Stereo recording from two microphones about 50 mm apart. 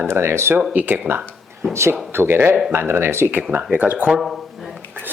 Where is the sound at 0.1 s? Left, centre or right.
Right.